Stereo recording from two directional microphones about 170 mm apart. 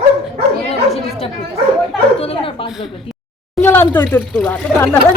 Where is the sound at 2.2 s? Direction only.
35° left (ahead or behind).